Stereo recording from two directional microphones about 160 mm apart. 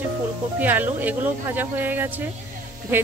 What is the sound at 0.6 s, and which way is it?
A woman's voice, 10° right (ahead or behind).